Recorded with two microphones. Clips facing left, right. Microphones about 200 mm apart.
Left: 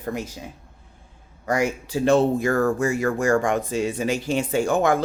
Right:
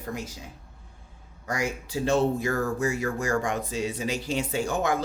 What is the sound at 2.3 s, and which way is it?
Speech, 50° left (ahead or behind).